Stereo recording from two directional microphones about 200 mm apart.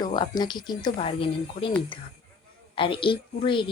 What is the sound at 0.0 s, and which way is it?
A woman's voice, 20° left (ahead or behind).